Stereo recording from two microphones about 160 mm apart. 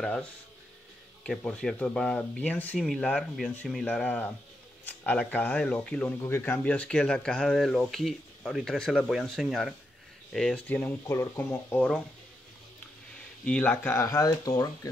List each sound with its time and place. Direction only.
0.0 s speech: 5° left (ahead or behind)
13.5 s speech: 10° left (ahead or behind)